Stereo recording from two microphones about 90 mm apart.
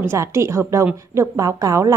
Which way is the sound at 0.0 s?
30° right (ahead or behind).